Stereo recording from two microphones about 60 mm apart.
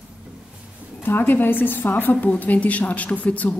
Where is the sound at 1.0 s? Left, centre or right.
Left.